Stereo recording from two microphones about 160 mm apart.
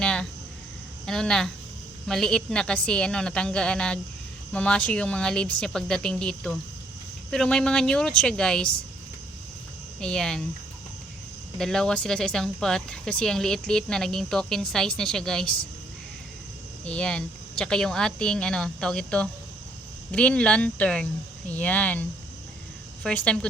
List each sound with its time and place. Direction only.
0.0 s a sound: 5° left (ahead or behind)
1.0 s speech: 5° left (ahead or behind)
10.0 s speech: 5° left (ahead or behind)
11.5 s speech: 5° left (ahead or behind)
16.8 s speech: 5° left (ahead or behind)
23.0 s speech: 5° left (ahead or behind)